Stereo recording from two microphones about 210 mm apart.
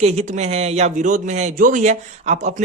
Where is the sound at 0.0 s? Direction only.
30° right (ahead or behind).